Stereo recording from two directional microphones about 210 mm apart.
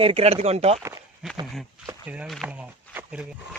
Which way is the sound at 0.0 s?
25° right (ahead or behind).